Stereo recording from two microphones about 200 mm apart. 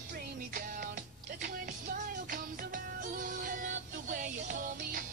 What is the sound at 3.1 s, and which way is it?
Music, 40° right (ahead or behind).